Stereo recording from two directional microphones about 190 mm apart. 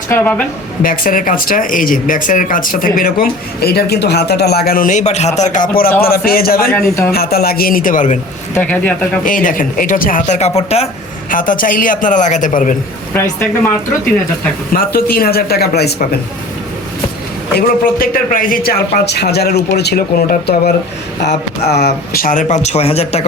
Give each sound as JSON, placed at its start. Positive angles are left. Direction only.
{"t": 0.1, "sound": "speech", "side_deg": 10}
{"t": 0.8, "sound": "speech", "side_deg": 45}
{"t": 8.5, "sound": "speech", "side_deg": 10}
{"t": 9.2, "sound": "speech", "side_deg": 45}
{"t": 11.3, "sound": "speech", "side_deg": 45}
{"t": 14.7, "sound": "speech", "side_deg": 50}
{"t": 17.5, "sound": "speech", "side_deg": 50}